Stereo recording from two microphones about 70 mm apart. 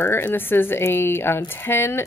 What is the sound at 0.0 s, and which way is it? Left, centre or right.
Speech, left.